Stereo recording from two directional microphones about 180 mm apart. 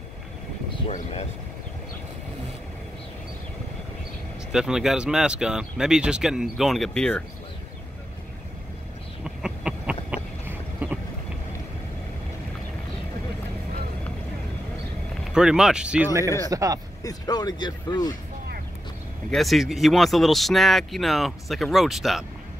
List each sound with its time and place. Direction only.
0.8 s speech: 35° left (ahead or behind)
4.5 s speech: 5° right (ahead or behind)
9.2 s a sound: 5° right (ahead or behind)
15.3 s speech: 5° right (ahead or behind)
16.4 s speech: 20° right (ahead or behind)
17.0 s speech: 20° left (ahead or behind)
19.3 s speech: centre (ahead or behind)